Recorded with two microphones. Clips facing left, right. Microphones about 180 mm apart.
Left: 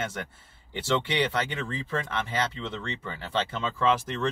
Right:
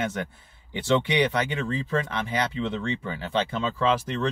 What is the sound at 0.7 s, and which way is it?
Speech, 10° right (ahead or behind).